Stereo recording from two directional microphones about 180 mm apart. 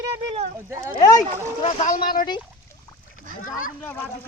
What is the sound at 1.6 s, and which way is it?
Speech, 45° left (ahead or behind).